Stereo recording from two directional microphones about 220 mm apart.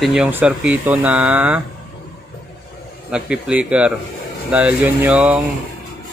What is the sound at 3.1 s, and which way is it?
Speech, 5° right (ahead or behind).